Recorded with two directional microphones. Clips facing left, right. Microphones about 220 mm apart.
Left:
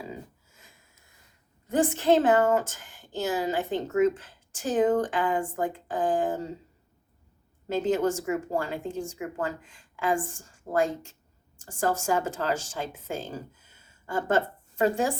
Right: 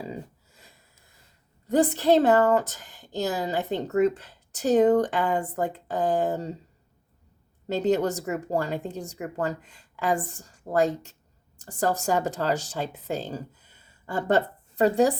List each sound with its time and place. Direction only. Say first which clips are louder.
0.0 s sniff: right 3 dB; 35° right (ahead or behind)
1.6 s a woman's voice: right 2 dB; 35° right (ahead or behind)
7.7 s a woman's voice: right 1 dB; 40° right (ahead or behind)